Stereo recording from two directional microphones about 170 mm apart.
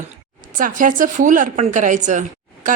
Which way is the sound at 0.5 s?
50° right (ahead or behind).